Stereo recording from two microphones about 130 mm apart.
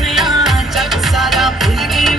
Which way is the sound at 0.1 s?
Centre (ahead or behind).